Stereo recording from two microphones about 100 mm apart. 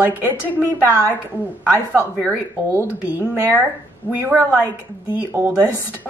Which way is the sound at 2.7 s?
20° right (ahead or behind).